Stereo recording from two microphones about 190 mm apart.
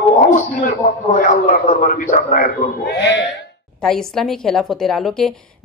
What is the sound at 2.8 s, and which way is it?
Speech, 65° left (ahead or behind).